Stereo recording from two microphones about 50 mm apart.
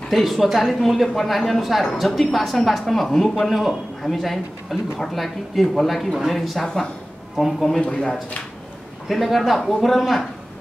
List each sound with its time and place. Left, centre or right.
0.1 s speech: centre
6.6 s a woman's voice: centre
7.3 s speech: centre
7.8 s speech: centre
9.1 s speech: centre